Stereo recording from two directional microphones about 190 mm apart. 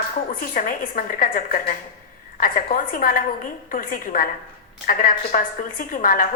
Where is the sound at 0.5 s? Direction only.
45° left (ahead or behind).